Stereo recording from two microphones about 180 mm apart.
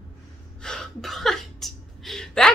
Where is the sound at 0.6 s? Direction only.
5° left (ahead or behind).